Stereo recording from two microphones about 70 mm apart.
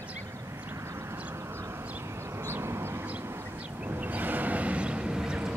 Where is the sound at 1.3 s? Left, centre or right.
Right.